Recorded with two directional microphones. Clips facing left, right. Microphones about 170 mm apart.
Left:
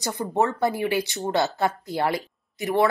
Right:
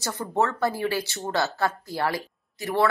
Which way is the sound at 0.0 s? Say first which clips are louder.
Left 2 dB; 15° left (ahead or behind).